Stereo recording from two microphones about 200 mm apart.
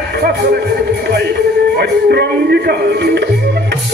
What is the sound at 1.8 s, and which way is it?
A man's voice, 55° right (ahead or behind).